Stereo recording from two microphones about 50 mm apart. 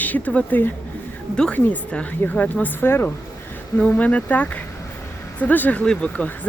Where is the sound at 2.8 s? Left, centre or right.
Left.